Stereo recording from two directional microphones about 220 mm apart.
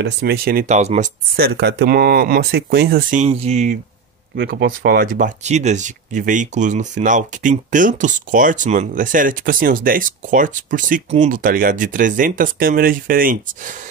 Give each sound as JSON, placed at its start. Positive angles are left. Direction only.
{"t": 0.0, "sound": "speech", "side_deg": -45}
{"t": 4.4, "sound": "speech", "side_deg": -45}